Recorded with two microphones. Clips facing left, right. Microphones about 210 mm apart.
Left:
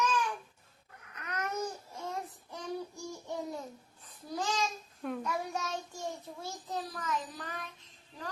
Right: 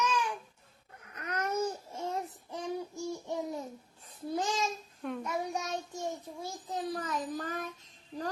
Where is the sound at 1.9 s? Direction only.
30° right (ahead or behind).